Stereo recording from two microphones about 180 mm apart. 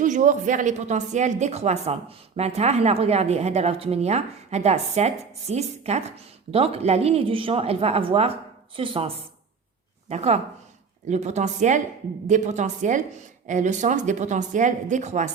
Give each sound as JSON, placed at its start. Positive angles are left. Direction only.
{"t": 0.0, "sound": "a woman's voice", "side_deg": -45}